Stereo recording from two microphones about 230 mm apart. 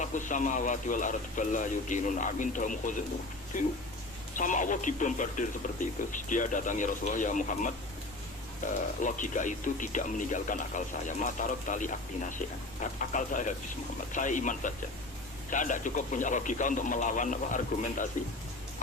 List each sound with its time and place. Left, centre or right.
0.0 s speech: left
4.4 s speech: left
9.0 s speech: left